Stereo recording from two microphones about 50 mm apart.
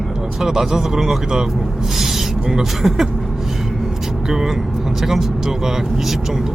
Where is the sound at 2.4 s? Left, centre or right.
Centre.